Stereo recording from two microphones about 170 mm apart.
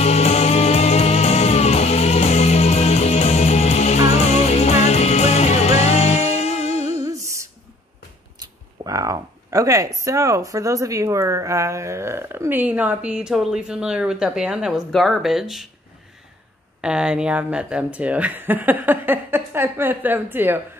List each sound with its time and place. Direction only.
0.0 s music: 40° left (ahead or behind)
7.1 s a sound: 15° right (ahead or behind)
8.8 s speech: 20° right (ahead or behind); by 15.7 s centre (ahead or behind)
16.8 s speech: 5° right (ahead or behind)